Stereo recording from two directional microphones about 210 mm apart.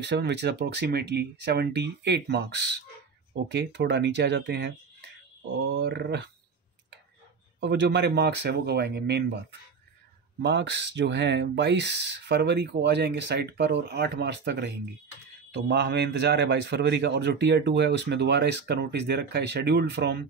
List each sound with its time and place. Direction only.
0.0 s a man's voice: 55° right (ahead or behind)
7.6 s a man's voice: 55° right (ahead or behind)